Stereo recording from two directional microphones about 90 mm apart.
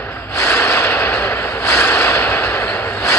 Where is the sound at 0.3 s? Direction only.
30° left (ahead or behind).